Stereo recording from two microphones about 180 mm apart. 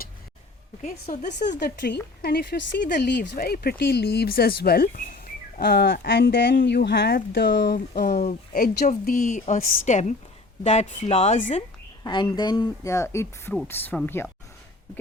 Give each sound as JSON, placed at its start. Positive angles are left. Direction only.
{"t": 0.8, "sound": "a woman's voice", "side_deg": 50}
{"t": 1.5, "sound": "speech", "side_deg": 65}
{"t": 12.0, "sound": "speech", "side_deg": 25}